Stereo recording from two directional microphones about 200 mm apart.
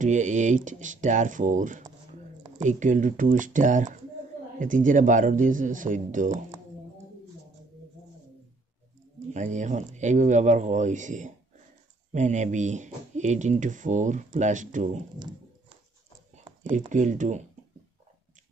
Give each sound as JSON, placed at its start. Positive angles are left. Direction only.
{"t": 0.0, "sound": "speech", "side_deg": -35}
{"t": 9.3, "sound": "speech", "side_deg": -35}
{"t": 16.9, "sound": "speech", "side_deg": -40}